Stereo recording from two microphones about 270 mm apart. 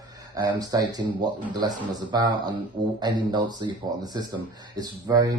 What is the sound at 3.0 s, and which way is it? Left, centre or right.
Speech, centre.